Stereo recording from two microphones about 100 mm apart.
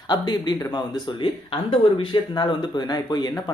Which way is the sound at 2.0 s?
50° left (ahead or behind).